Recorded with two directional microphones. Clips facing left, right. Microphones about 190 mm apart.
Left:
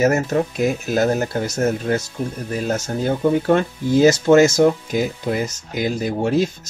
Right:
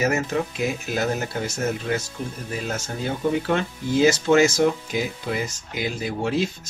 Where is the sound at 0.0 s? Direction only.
45° left (ahead or behind).